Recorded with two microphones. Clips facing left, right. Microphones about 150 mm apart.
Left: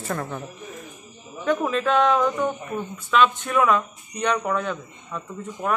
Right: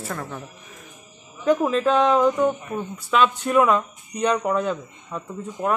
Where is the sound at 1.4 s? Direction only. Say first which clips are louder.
Right 3 dB; 10° right (ahead or behind).